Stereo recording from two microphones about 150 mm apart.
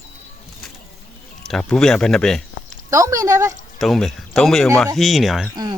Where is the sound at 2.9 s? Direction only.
20° right (ahead or behind).